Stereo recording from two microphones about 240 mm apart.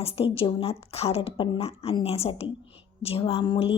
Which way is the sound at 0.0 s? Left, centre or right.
Left.